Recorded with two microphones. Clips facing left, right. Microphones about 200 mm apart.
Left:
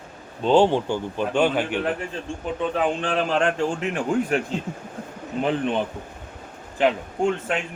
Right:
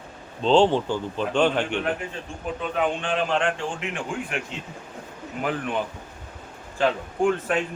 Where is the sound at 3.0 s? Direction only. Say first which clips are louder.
Left 2 dB; 40° left (ahead or behind).